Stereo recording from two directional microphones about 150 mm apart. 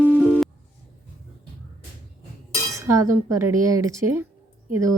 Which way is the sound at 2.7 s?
20° right (ahead or behind).